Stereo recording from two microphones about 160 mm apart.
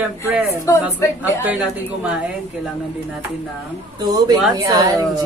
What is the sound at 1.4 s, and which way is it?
Speech, 10° right (ahead or behind).